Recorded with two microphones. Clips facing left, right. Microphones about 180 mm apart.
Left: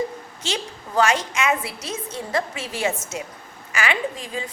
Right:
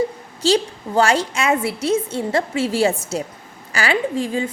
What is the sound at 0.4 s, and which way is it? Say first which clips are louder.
A woman's voice: right 12 dB; 30° right (ahead or behind).